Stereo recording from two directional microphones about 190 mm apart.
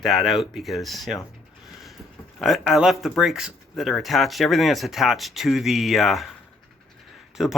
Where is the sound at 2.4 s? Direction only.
Centre (ahead or behind).